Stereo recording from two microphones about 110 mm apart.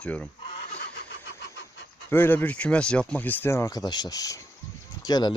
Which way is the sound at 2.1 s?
20° left (ahead or behind).